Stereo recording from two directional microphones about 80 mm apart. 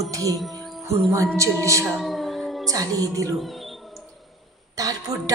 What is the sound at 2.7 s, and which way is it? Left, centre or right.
Speech, right.